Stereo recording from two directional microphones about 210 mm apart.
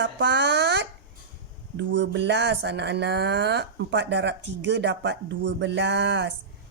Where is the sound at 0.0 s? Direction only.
55° right (ahead or behind).